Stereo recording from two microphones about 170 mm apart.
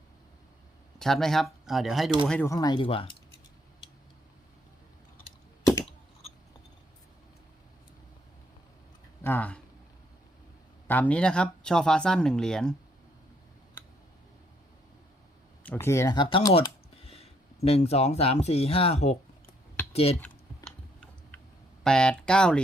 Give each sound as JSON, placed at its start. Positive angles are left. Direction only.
{"t": 0.9, "sound": "speech", "side_deg": 0}
{"t": 2.5, "sound": "speech", "side_deg": 25}
{"t": 9.2, "sound": "speech", "side_deg": 10}
{"t": 10.8, "sound": "speech", "side_deg": 10}
{"t": 15.6, "sound": "speech", "side_deg": 10}
{"t": 21.8, "sound": "speech", "side_deg": 5}